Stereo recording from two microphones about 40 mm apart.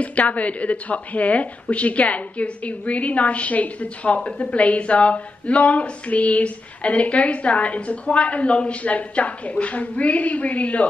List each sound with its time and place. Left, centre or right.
0.0 s a woman's voice: left